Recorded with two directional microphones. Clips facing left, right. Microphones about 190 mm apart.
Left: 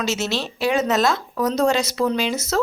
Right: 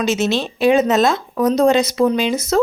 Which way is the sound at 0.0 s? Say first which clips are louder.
Right 6 dB; 15° right (ahead or behind).